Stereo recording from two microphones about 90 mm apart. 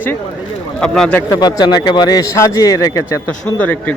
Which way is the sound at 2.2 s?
35° left (ahead or behind).